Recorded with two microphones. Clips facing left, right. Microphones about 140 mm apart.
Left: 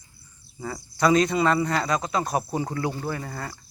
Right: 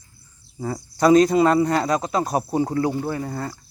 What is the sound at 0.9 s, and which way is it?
A man's voice, 40° right (ahead or behind).